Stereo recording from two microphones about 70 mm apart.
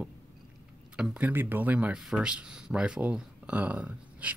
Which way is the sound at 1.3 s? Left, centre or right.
Right.